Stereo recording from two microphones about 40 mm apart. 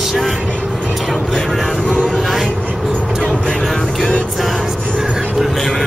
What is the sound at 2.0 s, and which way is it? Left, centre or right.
Music, centre.